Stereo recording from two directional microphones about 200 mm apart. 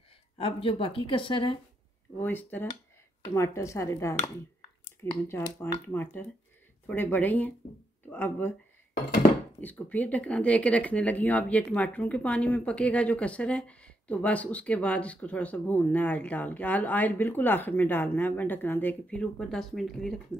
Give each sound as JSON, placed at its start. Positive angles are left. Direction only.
{"t": 0.4, "sound": "a woman's voice", "side_deg": 25}
{"t": 2.2, "sound": "speech", "side_deg": 10}
{"t": 5.3, "sound": "speech", "side_deg": 10}
{"t": 9.6, "sound": "speech", "side_deg": 10}